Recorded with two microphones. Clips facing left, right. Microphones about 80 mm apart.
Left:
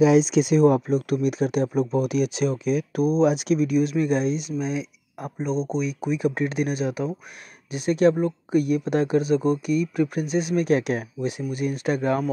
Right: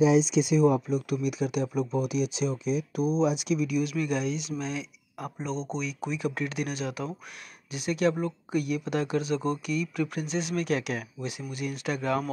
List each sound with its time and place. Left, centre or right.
0.0 s speech: left; by 5.9 s centre
6.1 s speech: left